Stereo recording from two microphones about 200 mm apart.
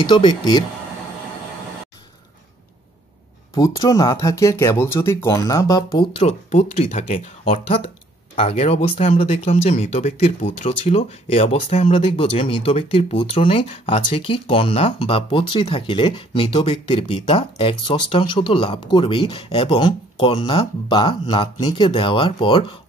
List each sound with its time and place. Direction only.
0.0 s speech: 25° left (ahead or behind)
3.5 s speech: 15° left (ahead or behind)